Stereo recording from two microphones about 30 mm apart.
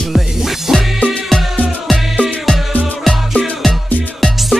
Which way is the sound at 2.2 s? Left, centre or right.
Left.